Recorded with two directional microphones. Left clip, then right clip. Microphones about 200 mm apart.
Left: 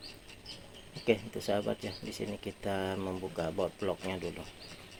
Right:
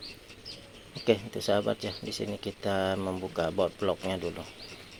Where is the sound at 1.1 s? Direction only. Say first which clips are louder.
Right 4 dB; 15° right (ahead or behind).